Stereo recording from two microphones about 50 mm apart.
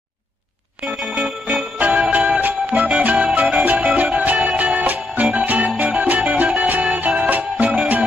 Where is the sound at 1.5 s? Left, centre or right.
Right.